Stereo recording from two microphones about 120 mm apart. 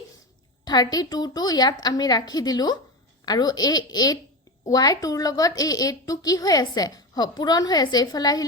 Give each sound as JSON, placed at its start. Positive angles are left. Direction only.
{"t": 0.6, "sound": "a woman's voice", "side_deg": 35}